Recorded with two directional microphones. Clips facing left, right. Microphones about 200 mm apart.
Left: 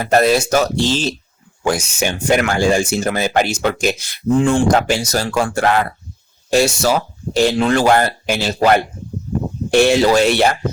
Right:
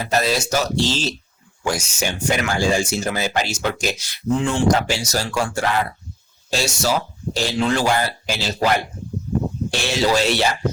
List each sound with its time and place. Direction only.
0.0 s speech: 55° left (ahead or behind)